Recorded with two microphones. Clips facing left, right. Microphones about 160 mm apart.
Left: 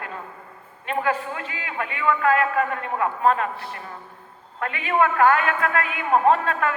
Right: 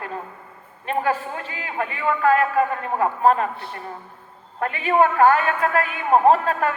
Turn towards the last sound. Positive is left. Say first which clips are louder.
# right 2 dB
turn(degrees=-35)  # may be behind; listen again after turning